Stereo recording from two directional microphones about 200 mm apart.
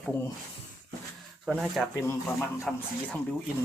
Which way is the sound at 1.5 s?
Centre (ahead or behind).